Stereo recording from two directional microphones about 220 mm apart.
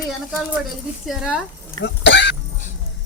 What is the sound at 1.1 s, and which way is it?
Speech, 5° right (ahead or behind).